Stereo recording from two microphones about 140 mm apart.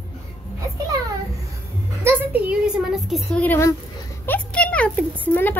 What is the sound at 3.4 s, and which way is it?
Speech, 15° left (ahead or behind).